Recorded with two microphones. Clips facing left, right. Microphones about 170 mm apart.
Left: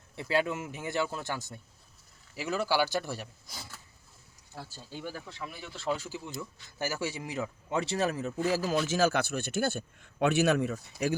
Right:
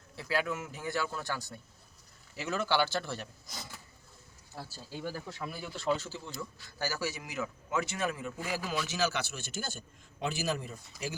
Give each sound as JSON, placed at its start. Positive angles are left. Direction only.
{"t": 0.2, "sound": "speech", "side_deg": 25}
{"t": 2.3, "sound": "speech", "side_deg": 5}
{"t": 4.5, "sound": "speech", "side_deg": -10}
{"t": 6.1, "sound": "a man's voice", "side_deg": 15}